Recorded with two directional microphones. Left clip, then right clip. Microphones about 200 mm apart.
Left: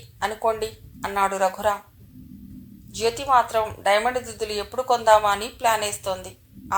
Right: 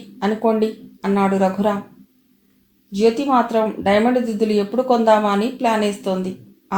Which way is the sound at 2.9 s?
35° left (ahead or behind).